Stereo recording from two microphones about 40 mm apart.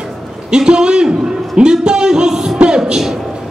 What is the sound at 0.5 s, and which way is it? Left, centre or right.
Music, right.